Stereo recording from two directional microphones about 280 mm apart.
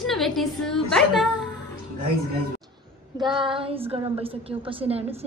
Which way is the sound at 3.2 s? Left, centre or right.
Centre.